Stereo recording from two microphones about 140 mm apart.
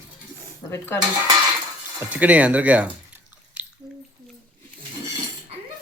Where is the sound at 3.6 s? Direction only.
10° right (ahead or behind).